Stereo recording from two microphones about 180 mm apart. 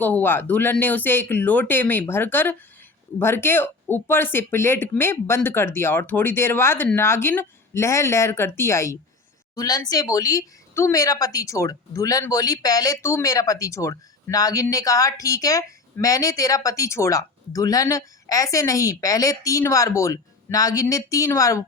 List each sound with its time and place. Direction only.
0.0 s a woman's voice: 10° left (ahead or behind)